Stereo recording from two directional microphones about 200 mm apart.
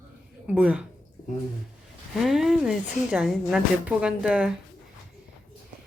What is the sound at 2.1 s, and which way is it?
A woman's voice, centre (ahead or behind).